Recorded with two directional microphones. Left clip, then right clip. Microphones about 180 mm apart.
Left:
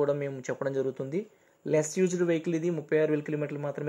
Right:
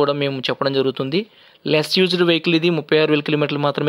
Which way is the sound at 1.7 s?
35° right (ahead or behind).